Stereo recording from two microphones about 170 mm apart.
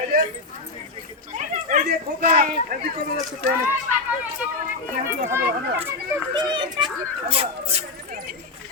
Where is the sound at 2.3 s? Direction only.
50° right (ahead or behind).